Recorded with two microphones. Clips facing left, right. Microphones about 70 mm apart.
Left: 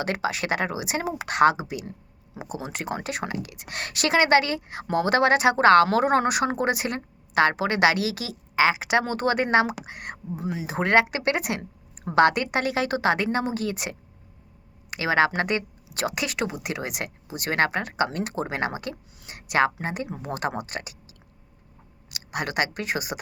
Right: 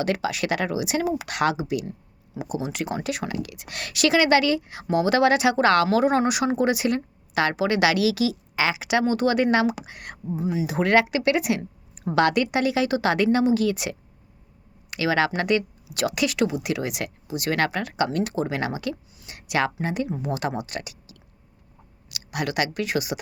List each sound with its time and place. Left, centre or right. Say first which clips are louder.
0.0 s speech: right 2 dB; left
10.7 s speech: even; left